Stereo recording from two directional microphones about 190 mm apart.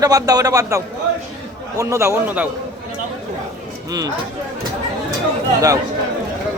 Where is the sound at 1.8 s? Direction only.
15° right (ahead or behind).